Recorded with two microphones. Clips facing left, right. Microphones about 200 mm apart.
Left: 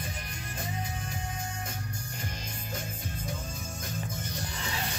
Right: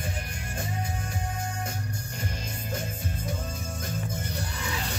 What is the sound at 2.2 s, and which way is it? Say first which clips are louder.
Music: right 4 dB; 50° right (ahead or behind).